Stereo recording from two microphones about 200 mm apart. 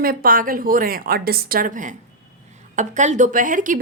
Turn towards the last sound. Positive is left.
turn(degrees=-40)  # may be behind; listen again after turning